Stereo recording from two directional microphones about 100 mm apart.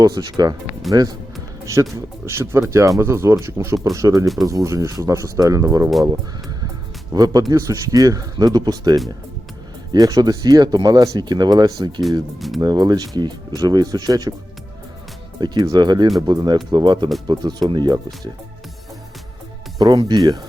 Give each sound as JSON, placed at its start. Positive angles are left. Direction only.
{"t": 0.0, "sound": "speech", "side_deg": -45}
{"t": 7.1, "sound": "speech", "side_deg": -40}
{"t": 15.4, "sound": "speech", "side_deg": -45}
{"t": 19.8, "sound": "speech", "side_deg": -40}